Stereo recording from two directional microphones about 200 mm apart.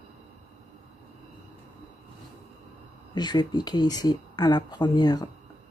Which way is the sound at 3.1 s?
20° left (ahead or behind).